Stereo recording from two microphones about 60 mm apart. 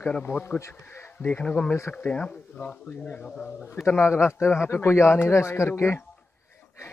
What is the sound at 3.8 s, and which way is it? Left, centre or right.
A man's voice, left.